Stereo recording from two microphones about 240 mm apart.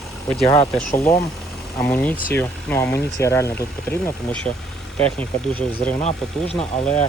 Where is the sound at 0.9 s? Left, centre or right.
Centre.